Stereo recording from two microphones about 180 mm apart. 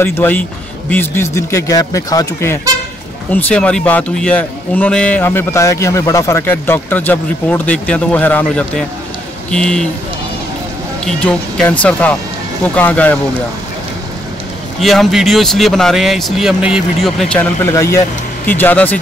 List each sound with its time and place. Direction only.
0.0 s a man's voice: 10° left (ahead or behind)
11.1 s a man's voice: 5° left (ahead or behind)
14.8 s speech: centre (ahead or behind)
17.6 s a man's voice: 15° left (ahead or behind)